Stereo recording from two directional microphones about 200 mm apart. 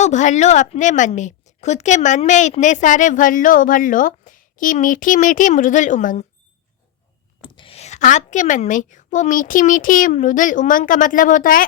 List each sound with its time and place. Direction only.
0.0 s a woman's voice: 35° left (ahead or behind)
7.4 s a woman's voice: 25° left (ahead or behind); by 11.6 s 40° left (ahead or behind)